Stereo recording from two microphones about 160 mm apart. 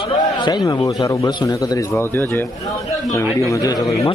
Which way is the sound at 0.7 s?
25° left (ahead or behind).